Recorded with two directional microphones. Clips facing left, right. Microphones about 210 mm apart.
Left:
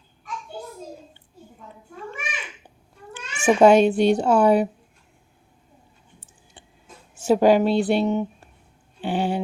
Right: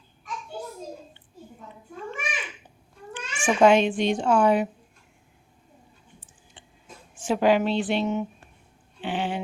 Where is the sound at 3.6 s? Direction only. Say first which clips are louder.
Left 4 dB; 40° left (ahead or behind).